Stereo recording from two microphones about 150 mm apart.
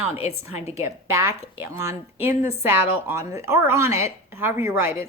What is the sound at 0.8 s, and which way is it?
Speech, 15° right (ahead or behind).